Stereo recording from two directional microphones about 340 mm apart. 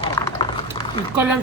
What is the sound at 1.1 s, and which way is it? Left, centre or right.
Speech, centre.